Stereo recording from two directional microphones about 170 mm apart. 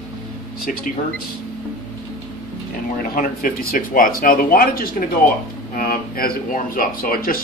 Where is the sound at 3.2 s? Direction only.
55° left (ahead or behind).